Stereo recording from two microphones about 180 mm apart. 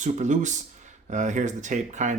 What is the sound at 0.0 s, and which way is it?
Speech, 40° right (ahead or behind).